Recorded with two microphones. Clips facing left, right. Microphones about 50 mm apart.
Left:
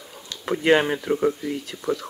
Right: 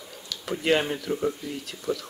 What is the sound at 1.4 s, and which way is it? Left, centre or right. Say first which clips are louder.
Speech: left 6 dB; left.